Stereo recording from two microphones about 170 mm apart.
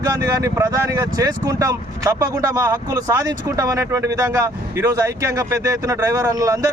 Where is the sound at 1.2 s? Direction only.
20° right (ahead or behind).